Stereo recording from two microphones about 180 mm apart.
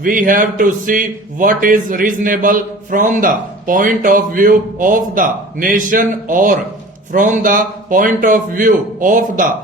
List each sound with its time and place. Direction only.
0.0 s a man's voice: 50° right (ahead or behind)